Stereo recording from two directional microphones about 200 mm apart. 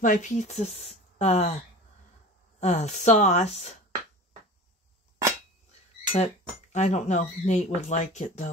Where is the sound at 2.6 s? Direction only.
35° left (ahead or behind).